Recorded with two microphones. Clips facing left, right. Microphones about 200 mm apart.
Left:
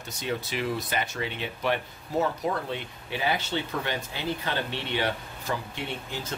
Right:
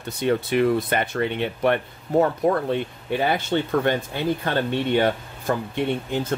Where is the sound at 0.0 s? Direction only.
60° right (ahead or behind).